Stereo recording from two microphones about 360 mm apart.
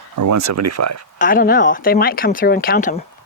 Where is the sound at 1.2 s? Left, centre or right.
Left.